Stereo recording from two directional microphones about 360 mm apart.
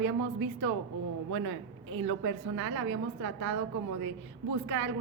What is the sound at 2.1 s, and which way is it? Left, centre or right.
A woman's voice, right.